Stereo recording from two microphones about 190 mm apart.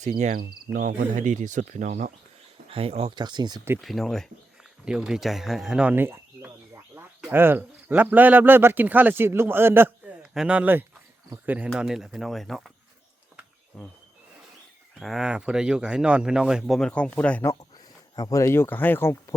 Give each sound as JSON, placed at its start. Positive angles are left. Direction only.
{"t": 0.0, "sound": "speech", "side_deg": -40}
{"t": 3.8, "sound": "speech", "side_deg": 0}
{"t": 14.9, "sound": "speech", "side_deg": 0}